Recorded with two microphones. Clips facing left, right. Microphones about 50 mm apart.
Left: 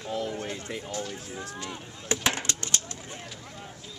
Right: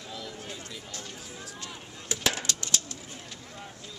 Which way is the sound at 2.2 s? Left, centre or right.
Left.